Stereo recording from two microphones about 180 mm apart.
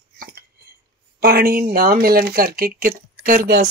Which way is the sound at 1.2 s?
55° right (ahead or behind).